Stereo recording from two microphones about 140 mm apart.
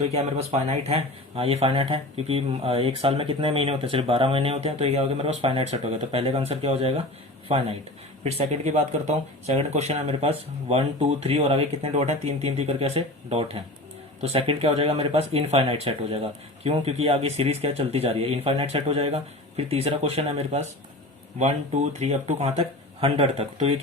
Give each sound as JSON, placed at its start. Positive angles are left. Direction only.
{"t": 0.1, "sound": "speech", "side_deg": -50}